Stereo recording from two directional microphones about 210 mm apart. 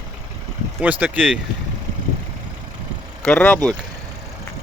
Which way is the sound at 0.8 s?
5° right (ahead or behind).